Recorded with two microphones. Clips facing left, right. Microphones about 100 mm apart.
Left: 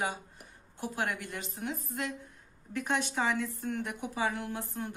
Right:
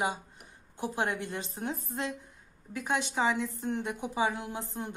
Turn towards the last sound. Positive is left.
turn(degrees=-20)  # may be behind; listen again after turning